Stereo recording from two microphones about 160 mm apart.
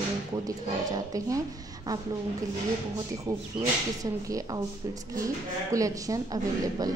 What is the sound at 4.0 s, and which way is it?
Speech, 20° right (ahead or behind).